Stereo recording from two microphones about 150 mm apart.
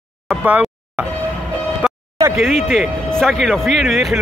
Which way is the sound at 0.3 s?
10° right (ahead or behind).